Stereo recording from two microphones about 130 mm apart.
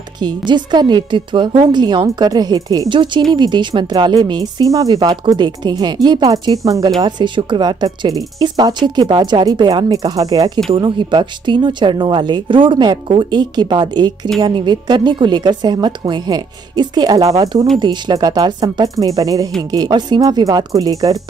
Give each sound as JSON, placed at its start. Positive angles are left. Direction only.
{"t": 0.2, "sound": "speech", "side_deg": -35}